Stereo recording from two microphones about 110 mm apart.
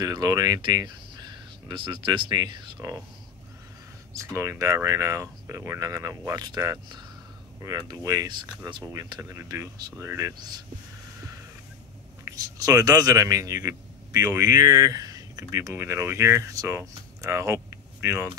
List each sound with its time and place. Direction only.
0.0 s speech: 35° right (ahead or behind)
4.1 s speech: 30° right (ahead or behind); by 8.9 s 45° right (ahead or behind)
9.3 s speech: 25° right (ahead or behind)
9.8 s speech: 40° right (ahead or behind)
10.0 s speech: 25° right (ahead or behind)
12.3 s speech: 30° right (ahead or behind)